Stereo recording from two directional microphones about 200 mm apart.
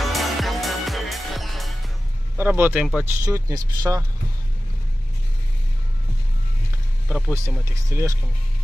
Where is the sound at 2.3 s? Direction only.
10° right (ahead or behind).